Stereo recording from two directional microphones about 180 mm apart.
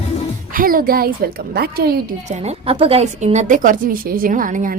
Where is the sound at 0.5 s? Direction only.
50° right (ahead or behind).